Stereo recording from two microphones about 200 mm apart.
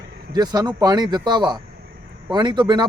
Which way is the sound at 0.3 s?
20° right (ahead or behind).